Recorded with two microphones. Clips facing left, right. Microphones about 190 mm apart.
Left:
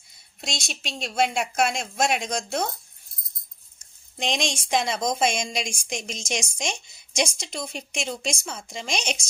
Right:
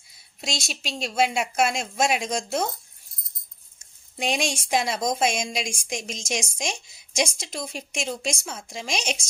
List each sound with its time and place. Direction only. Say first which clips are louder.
0.4 s a woman's voice: right 2 dB; 5° right (ahead or behind)
4.2 s a woman's voice: right 1 dB; 5° right (ahead or behind)